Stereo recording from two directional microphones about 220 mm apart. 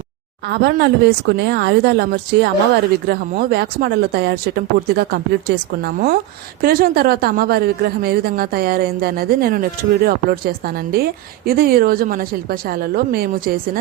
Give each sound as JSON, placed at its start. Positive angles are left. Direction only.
{"t": 0.4, "sound": "a woman's voice", "side_deg": -50}